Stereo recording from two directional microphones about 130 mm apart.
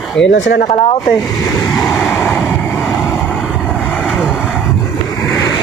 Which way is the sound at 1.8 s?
5° left (ahead or behind).